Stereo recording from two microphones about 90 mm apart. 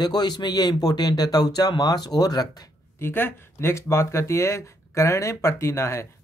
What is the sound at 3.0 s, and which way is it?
Speech, 25° left (ahead or behind).